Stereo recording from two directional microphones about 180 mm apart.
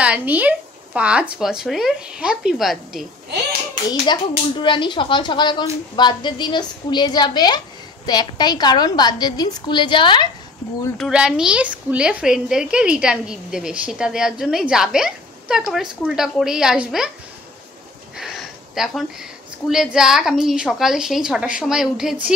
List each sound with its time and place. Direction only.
0.0 s a woman's voice: 10° right (ahead or behind)
4.1 s a woman's voice: 25° left (ahead or behind)
11.0 s a woman's voice: 5° right (ahead or behind)
18.1 s a sound: centre (ahead or behind)
19.7 s a woman's voice: 5° right (ahead or behind)